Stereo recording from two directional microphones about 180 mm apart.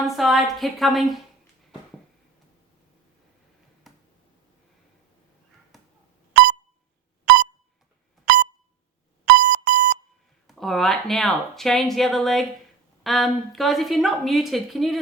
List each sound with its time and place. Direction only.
0.0 s speech: centre (ahead or behind)
3.9 s a sound: centre (ahead or behind)
7.3 s beep: 60° right (ahead or behind)
9.2 s alarm: 60° right (ahead or behind)
10.4 s speech: centre (ahead or behind)